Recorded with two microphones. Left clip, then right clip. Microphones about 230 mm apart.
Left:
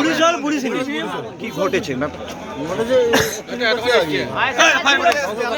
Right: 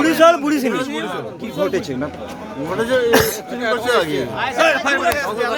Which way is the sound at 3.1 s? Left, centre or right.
Right.